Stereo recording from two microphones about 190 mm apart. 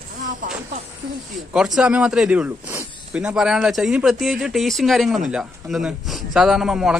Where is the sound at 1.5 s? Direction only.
5° right (ahead or behind).